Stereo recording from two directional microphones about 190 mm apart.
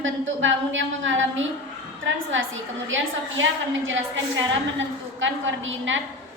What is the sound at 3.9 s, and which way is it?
Speech, 90° right.